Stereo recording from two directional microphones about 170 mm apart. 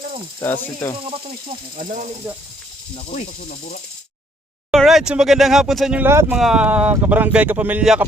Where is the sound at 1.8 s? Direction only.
55° right (ahead or behind).